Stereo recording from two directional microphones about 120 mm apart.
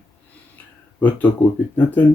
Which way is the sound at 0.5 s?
15° left (ahead or behind).